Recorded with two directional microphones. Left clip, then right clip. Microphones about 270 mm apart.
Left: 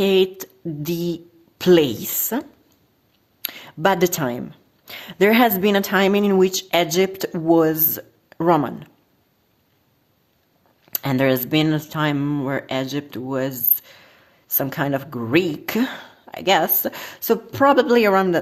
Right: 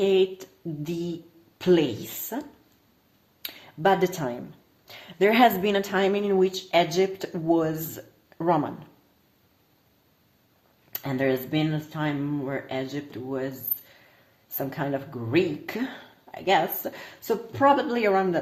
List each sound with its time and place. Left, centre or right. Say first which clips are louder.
0.0 s speech: left 4 dB; left
3.4 s a sound: left 4 dB; left
4.9 s speech: left 5 dB; left
10.9 s speech: left 6 dB; left